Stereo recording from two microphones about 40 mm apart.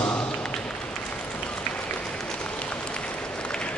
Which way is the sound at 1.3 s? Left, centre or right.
Left.